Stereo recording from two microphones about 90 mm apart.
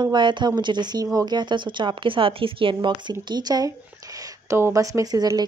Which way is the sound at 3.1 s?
50° right (ahead or behind).